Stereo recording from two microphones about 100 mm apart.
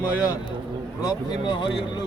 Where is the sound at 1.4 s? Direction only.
50° left (ahead or behind).